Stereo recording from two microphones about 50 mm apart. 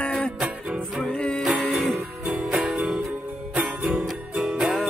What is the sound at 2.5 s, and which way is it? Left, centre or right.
Music, centre.